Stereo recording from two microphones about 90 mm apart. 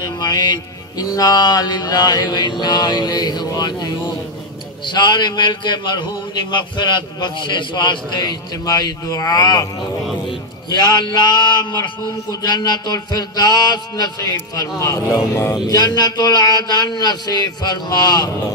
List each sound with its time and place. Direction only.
0.0 s a man's voice: 45° left (ahead or behind)
10.7 s a man's voice: 55° left (ahead or behind); by 15.5 s 30° left (ahead or behind)
15.5 s a man's voice: 50° left (ahead or behind)